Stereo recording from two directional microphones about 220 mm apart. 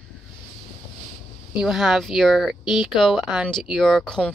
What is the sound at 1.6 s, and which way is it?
Speech, centre (ahead or behind).